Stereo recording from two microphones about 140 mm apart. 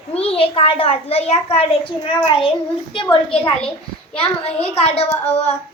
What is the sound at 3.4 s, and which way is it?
Speech, 10° left (ahead or behind).